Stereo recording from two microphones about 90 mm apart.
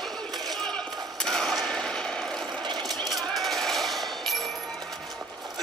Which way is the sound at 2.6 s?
55° right (ahead or behind).